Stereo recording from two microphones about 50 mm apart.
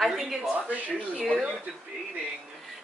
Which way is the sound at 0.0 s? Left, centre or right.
Centre.